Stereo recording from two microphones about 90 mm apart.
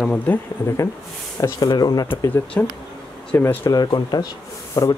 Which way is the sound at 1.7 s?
50° left (ahead or behind).